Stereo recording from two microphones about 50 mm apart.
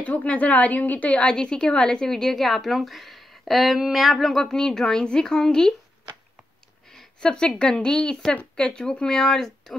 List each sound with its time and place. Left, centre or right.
0.0 s a woman's voice: left
1.2 s a woman's voice: centre
6.9 s a woman's voice: centre